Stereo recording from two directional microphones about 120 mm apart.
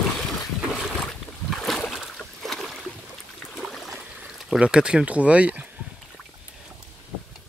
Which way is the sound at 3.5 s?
Centre (ahead or behind).